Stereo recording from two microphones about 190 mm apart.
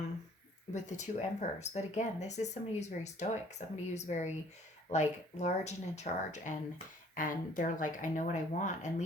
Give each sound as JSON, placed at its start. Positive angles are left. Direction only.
{"t": 0.7, "sound": "speech", "side_deg": 40}